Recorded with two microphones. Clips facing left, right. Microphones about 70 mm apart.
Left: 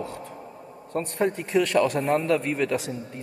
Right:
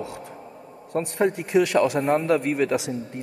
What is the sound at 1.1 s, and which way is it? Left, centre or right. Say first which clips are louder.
A man's voice: right 3 dB; right.